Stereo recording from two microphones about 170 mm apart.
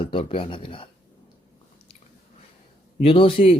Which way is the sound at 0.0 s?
30° left (ahead or behind).